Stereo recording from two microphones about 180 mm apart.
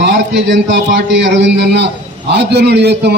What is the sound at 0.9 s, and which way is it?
A man's voice, 75° right (ahead or behind).